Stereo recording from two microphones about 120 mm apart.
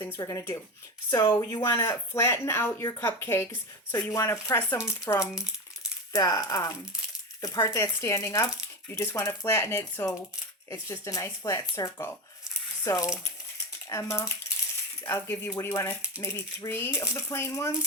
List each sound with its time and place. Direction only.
0.0 s speech: 25° left (ahead or behind)